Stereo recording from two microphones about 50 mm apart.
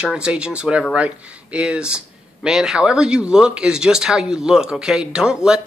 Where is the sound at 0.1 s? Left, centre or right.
Centre.